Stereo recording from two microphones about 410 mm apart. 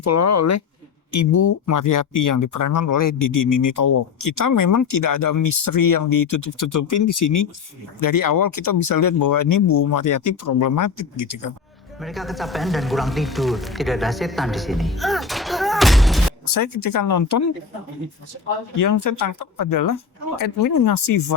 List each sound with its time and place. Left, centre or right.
0.0 s speech: left
12.0 s speech: centre
16.5 s speech: left
18.8 s speech: left